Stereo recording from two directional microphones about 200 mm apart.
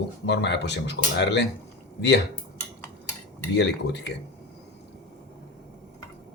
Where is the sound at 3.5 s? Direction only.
60° left (ahead or behind).